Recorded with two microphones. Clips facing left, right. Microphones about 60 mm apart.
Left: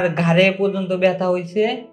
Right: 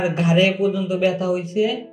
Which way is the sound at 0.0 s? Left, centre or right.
Left.